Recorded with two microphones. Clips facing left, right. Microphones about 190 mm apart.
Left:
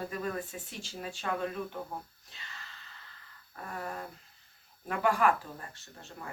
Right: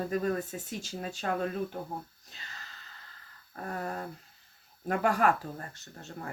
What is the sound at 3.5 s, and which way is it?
Speech, 40° right (ahead or behind).